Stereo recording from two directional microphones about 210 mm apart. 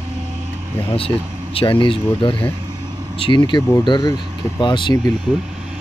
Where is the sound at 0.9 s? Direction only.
25° left (ahead or behind).